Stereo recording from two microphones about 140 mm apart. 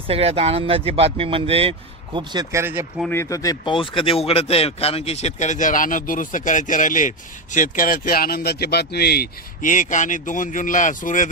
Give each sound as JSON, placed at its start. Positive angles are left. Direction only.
{"t": 0.1, "sound": "speech", "side_deg": -45}
{"t": 2.1, "sound": "speech", "side_deg": -30}
{"t": 3.1, "sound": "speech", "side_deg": 20}